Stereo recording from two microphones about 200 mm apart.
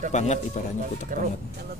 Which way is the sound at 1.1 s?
40° right (ahead or behind).